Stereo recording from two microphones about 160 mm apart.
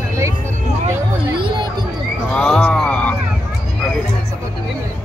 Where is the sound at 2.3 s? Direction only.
5° left (ahead or behind).